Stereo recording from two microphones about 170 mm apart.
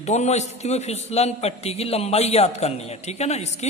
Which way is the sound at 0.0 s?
40° left (ahead or behind).